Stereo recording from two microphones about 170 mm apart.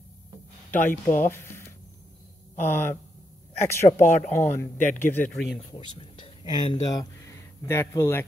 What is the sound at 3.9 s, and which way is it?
Speech, 50° left (ahead or behind).